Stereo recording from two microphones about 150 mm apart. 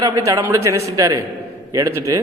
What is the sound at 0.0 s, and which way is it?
A man's voice, 20° right (ahead or behind).